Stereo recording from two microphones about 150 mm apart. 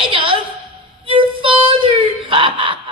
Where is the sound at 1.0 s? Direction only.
35° right (ahead or behind).